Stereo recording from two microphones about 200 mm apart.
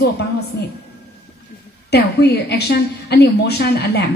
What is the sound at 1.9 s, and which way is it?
A woman's voice, 55° left (ahead or behind).